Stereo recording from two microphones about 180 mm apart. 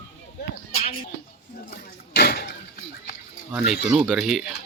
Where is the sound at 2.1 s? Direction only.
65° left (ahead or behind).